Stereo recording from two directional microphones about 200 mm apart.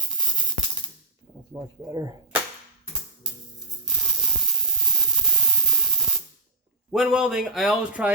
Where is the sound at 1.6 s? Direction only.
20° right (ahead or behind).